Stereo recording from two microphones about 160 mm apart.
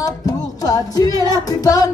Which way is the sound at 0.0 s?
20° left (ahead or behind).